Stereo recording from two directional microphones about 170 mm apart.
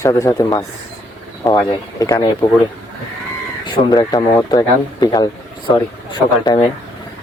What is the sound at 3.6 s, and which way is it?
Speech, 25° left (ahead or behind).